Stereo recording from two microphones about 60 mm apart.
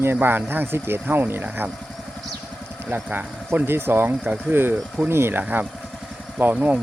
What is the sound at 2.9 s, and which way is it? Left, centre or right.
Speech, right.